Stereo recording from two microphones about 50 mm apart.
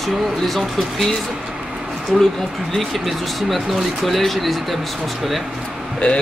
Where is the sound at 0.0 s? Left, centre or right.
Centre.